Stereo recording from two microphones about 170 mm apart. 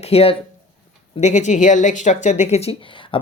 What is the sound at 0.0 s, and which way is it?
Speech, 35° left (ahead or behind).